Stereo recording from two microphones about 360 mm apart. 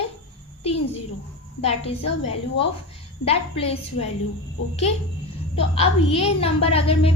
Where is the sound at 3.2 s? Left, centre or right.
Centre.